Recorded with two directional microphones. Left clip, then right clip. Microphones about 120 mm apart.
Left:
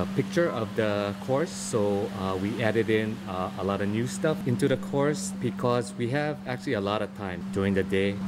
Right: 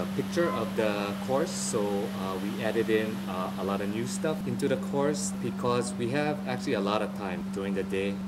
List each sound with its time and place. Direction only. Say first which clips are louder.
0.4 s speech: left 1 dB; 15° left (ahead or behind)